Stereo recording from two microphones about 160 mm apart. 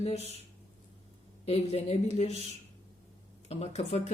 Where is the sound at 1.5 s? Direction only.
40° left (ahead or behind).